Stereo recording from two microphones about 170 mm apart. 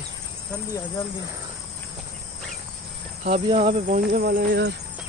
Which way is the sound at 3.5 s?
40° right (ahead or behind).